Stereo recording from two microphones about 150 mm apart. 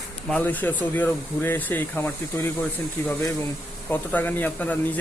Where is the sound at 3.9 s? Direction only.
10° left (ahead or behind).